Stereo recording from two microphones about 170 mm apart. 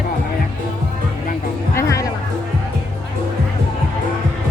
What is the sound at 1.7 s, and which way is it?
Music, 20° left (ahead or behind).